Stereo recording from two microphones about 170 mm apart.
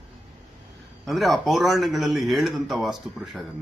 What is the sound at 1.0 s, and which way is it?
A man's voice, centre (ahead or behind).